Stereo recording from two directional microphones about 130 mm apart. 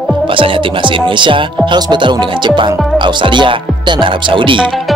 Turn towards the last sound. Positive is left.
turn(degrees=-40)  # may be behind; listen again after turning